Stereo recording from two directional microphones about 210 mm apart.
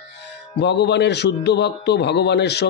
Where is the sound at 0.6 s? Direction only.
55° left (ahead or behind).